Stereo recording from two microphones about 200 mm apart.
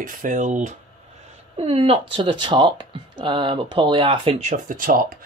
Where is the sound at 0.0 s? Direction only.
40° right (ahead or behind).